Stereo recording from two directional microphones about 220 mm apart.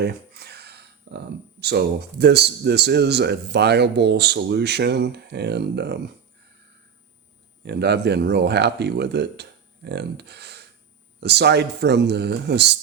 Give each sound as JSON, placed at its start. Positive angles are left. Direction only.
{"t": 0.0, "sound": "speech", "side_deg": -45}
{"t": 7.6, "sound": "speech", "side_deg": -50}
{"t": 9.4, "sound": "a sound", "side_deg": -50}
{"t": 11.2, "sound": "speech", "side_deg": -50}